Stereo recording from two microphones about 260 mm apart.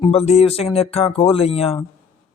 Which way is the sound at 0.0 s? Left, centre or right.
Left.